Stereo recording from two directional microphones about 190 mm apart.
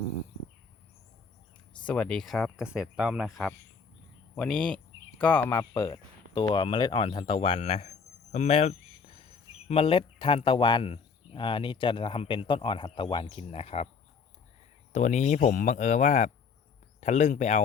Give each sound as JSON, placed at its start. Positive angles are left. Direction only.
{"t": 1.9, "sound": "speech", "side_deg": 5}
{"t": 5.7, "sound": "speech", "side_deg": 25}
{"t": 14.9, "sound": "speech", "side_deg": 40}